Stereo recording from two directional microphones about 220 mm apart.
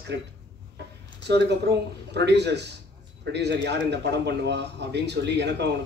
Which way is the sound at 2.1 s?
50° right (ahead or behind).